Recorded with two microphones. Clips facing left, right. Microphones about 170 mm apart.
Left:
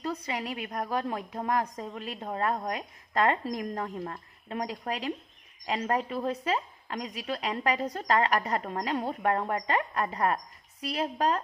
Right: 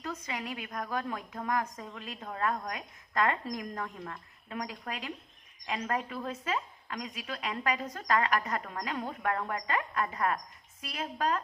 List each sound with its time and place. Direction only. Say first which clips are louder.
0.0 s a woman's voice: left 5 dB; 35° left (ahead or behind)